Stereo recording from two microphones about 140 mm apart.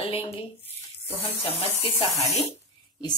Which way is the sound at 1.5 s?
40° left (ahead or behind).